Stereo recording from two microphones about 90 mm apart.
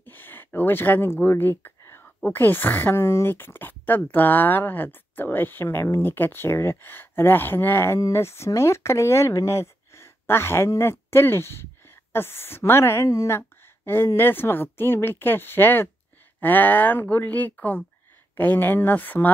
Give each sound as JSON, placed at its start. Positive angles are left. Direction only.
{"t": 0.0, "sound": "speech", "side_deg": 25}